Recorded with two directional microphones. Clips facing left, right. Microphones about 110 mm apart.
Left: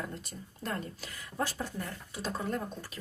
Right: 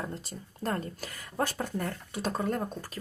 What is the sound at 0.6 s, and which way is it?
Speech, 45° right (ahead or behind).